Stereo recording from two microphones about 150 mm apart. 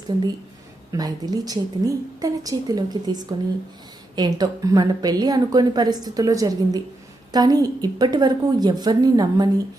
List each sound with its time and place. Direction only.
0.9 s a woman's voice: 25° right (ahead or behind)